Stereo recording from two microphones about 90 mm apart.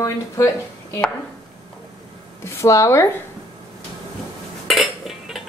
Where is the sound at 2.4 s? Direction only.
35° left (ahead or behind).